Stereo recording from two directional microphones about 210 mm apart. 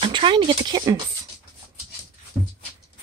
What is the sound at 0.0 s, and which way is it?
Speech, 25° right (ahead or behind).